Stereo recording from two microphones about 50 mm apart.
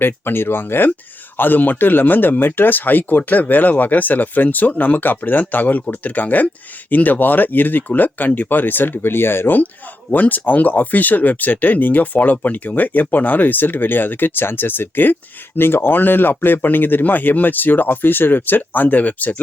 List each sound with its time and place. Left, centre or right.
0.0 s speech: left
10.1 s speech: left